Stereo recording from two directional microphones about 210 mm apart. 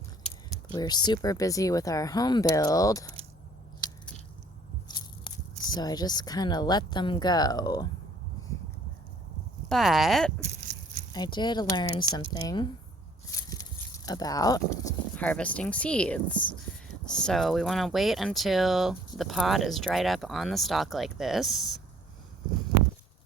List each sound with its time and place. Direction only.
0.7 s speech: 20° left (ahead or behind)
4.9 s speech: 20° left (ahead or behind)
9.6 s speech: centre (ahead or behind)
10.4 s a sound: 30° right (ahead or behind)
11.1 s speech: 20° left (ahead or behind)
13.5 s a sound: 15° left (ahead or behind)
15.1 s speech: 5° left (ahead or behind)